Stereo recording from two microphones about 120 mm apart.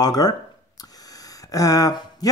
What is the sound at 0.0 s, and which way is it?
Speech, 30° left (ahead or behind).